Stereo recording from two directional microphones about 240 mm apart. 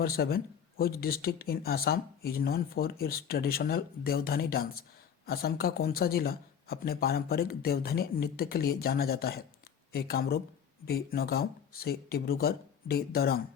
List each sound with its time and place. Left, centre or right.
0.0 s speech: left